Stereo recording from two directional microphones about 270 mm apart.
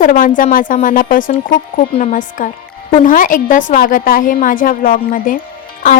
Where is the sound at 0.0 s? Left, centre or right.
Left.